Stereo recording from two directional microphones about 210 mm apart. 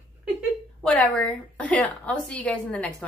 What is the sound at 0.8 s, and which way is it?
A woman's voice, 5° left (ahead or behind).